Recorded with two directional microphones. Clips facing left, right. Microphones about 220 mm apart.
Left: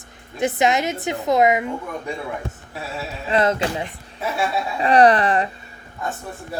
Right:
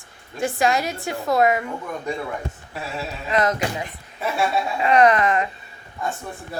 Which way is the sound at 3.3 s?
30° left (ahead or behind).